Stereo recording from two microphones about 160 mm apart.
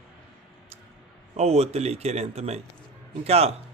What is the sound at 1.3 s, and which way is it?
Speech, 40° right (ahead or behind).